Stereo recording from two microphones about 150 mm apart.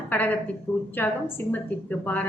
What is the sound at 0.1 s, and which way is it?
A woman's voice, 10° left (ahead or behind).